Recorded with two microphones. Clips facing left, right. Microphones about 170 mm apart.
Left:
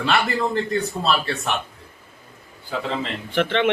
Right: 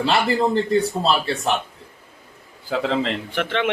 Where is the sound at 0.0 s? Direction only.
30° right (ahead or behind).